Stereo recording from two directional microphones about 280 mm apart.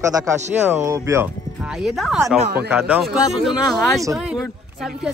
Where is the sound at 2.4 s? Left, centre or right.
Right.